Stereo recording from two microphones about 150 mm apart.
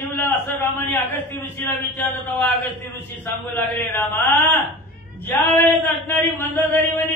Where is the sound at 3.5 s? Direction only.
10° left (ahead or behind).